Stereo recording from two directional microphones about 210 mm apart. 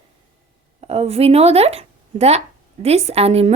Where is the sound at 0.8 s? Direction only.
30° right (ahead or behind).